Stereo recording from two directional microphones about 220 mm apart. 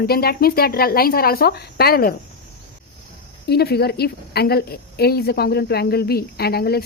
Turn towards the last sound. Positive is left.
turn(degrees=45)  # may be behind; listen again after turning